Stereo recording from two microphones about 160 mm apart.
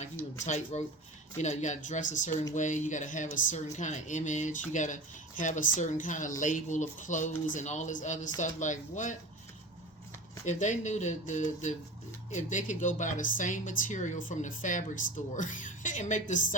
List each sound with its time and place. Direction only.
0.4 s speech: 45° left (ahead or behind)
10.4 s speech: 50° left (ahead or behind)